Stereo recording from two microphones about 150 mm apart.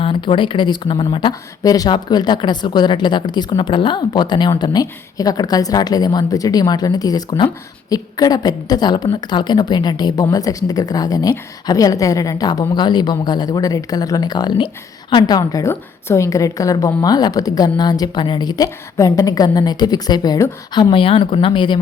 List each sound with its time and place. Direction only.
0.0 s a woman's voice: 35° left (ahead or behind)